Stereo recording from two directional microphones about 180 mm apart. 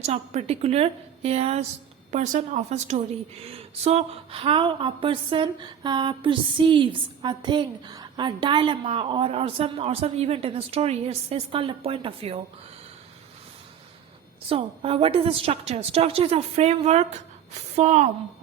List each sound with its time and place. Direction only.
0.0 s a woman's voice: 40° right (ahead or behind)
14.5 s a woman's voice: 30° right (ahead or behind)